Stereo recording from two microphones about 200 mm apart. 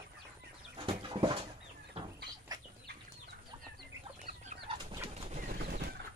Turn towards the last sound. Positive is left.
turn(degrees=-50)  # may be behind; listen again after turning